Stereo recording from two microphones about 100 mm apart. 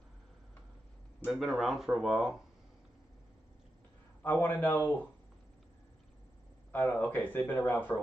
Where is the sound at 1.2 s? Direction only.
5° right (ahead or behind).